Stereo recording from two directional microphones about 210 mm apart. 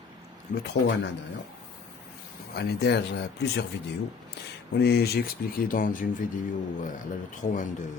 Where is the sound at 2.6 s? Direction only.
50° left (ahead or behind).